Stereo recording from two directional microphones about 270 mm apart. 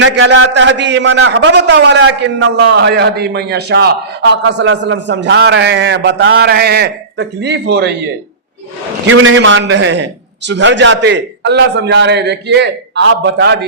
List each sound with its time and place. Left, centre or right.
0.0 s a man's voice: right
9.0 s a man's voice: right